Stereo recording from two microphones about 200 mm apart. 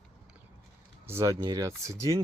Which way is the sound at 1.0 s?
15° right (ahead or behind).